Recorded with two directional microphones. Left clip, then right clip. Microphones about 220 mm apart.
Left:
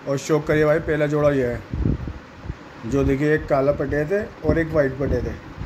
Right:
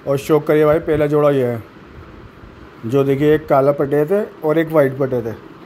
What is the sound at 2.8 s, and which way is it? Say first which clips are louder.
Speech: right 6 dB; 25° right (ahead or behind).